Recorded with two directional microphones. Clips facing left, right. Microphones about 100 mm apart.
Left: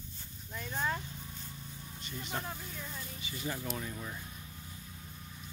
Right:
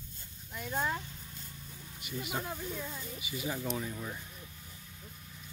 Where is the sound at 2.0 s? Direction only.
10° right (ahead or behind).